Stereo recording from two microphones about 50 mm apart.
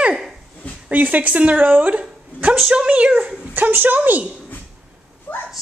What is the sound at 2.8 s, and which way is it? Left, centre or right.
Speech, right.